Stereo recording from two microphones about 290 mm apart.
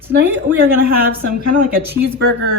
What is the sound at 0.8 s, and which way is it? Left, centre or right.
Speech, right.